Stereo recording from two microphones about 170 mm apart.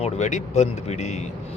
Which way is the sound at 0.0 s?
45° left (ahead or behind).